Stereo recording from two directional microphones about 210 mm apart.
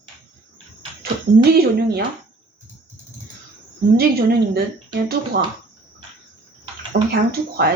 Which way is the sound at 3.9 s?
50° right (ahead or behind).